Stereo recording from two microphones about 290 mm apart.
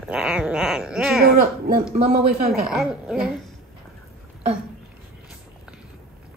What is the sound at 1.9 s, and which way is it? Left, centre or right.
Speech, right.